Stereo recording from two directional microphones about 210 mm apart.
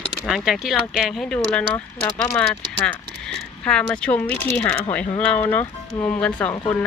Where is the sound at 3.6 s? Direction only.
5° left (ahead or behind).